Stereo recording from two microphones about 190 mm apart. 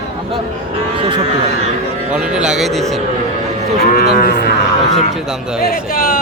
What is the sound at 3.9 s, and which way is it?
Cattle, 55° left (ahead or behind).